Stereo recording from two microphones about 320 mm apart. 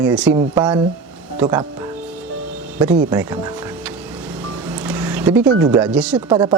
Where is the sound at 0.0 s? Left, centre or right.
Centre.